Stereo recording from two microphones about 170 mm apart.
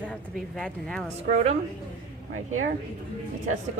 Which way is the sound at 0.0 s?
5° left (ahead or behind).